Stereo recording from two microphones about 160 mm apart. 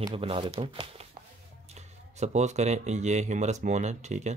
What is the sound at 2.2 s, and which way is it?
Speech, 45° right (ahead or behind).